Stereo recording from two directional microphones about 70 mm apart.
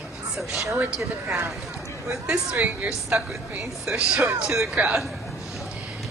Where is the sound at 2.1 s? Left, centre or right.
Centre.